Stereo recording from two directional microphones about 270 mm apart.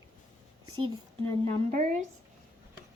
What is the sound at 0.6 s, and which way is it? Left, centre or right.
Speech, centre.